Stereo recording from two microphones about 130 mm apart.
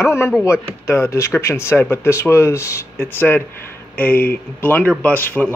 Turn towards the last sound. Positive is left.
turn(degrees=15)  # may be behind; listen again after turning